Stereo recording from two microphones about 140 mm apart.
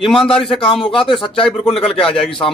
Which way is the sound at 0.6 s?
40° left (ahead or behind).